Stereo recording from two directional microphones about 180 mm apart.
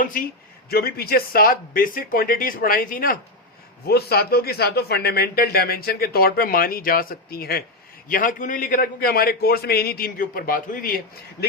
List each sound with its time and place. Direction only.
0.0 s a man's voice: 50° left (ahead or behind)